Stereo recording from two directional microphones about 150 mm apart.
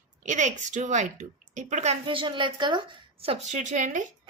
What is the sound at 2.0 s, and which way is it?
Speech, 35° right (ahead or behind).